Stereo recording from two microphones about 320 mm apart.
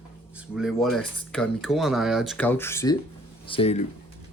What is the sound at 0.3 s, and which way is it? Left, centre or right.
Speech, centre.